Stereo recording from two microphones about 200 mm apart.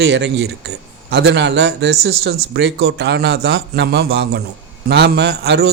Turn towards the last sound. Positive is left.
turn(degrees=-50)  # may be behind; listen again after turning